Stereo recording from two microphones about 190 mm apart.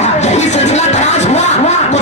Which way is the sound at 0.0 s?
35° left (ahead or behind).